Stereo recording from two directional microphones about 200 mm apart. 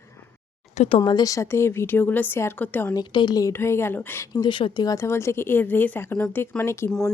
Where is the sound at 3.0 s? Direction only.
20° left (ahead or behind).